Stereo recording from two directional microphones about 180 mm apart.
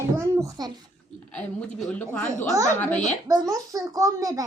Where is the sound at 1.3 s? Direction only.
5° left (ahead or behind).